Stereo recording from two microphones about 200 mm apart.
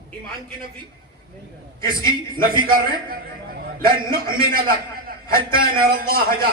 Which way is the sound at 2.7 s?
45° right (ahead or behind).